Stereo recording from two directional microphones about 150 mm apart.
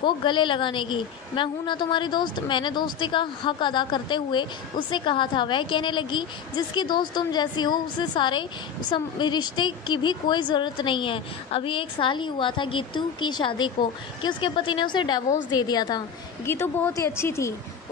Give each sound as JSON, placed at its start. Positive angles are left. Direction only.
{"t": 0.0, "sound": "a woman's voice", "side_deg": 30}
{"t": 16.4, "sound": "a woman's voice", "side_deg": 15}